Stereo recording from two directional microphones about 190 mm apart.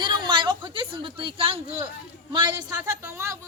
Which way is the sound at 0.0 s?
25° right (ahead or behind).